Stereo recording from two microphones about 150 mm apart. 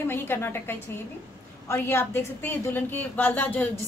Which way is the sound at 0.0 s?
15° left (ahead or behind).